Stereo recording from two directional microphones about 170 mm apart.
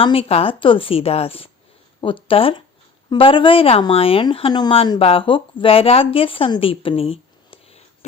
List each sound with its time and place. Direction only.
0.0 s speech: 35° left (ahead or behind)